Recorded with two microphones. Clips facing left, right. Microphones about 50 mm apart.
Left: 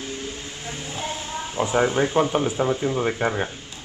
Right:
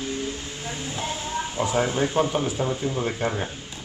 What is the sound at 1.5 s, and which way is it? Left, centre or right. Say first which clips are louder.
Speech: left 4 dB; centre.